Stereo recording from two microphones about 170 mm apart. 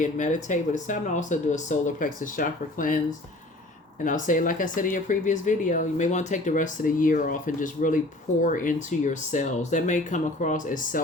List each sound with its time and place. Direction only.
0.0 s speech: 45° left (ahead or behind)
4.0 s speech: 50° left (ahead or behind)